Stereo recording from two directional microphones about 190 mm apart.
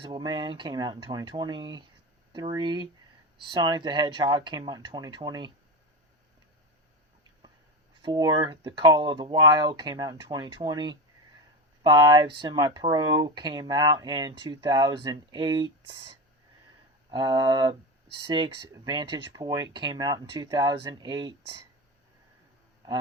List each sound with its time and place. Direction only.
0.0 s speech: 20° right (ahead or behind)
8.0 s speech: 25° right (ahead or behind)
17.1 s speech: 25° right (ahead or behind)